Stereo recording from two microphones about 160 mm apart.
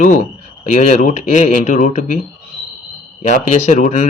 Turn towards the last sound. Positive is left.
turn(degrees=45)  # may be behind; listen again after turning